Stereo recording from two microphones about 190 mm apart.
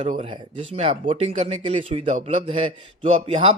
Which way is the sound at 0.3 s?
25° right (ahead or behind).